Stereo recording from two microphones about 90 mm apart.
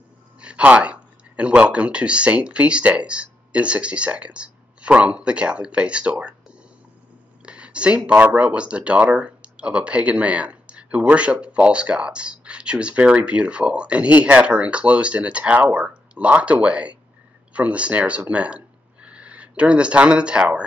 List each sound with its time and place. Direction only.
0.4 s speech: 15° right (ahead or behind)
7.4 s speech: 10° right (ahead or behind)